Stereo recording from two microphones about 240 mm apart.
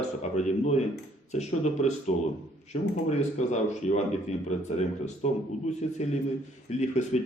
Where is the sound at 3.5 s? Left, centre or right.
Left.